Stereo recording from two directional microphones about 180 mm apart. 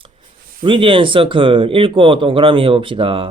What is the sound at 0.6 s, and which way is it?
Speech, 30° right (ahead or behind).